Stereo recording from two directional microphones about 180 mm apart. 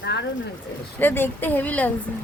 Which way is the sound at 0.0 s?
75° left (ahead or behind).